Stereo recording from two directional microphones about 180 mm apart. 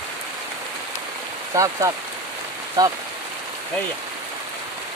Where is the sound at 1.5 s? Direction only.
20° right (ahead or behind).